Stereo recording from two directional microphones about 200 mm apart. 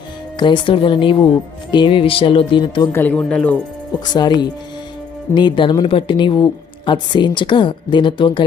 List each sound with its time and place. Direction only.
0.3 s speech: 25° left (ahead or behind)
2.9 s speech: 10° left (ahead or behind)
4.0 s speech: 20° left (ahead or behind)